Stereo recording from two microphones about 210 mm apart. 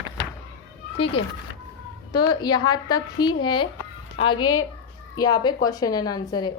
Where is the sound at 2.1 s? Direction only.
20° left (ahead or behind).